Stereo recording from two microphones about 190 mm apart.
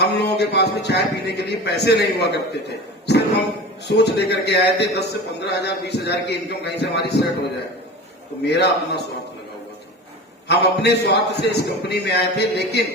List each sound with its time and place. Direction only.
0.0 s a man's voice: 60° left (ahead or behind)
8.4 s a man's voice: 60° left (ahead or behind)
10.5 s a man's voice: 60° left (ahead or behind)